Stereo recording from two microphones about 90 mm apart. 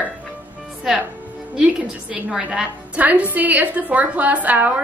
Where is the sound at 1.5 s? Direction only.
10° right (ahead or behind).